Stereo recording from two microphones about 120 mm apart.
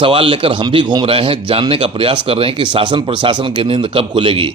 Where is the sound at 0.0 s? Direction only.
45° right (ahead or behind).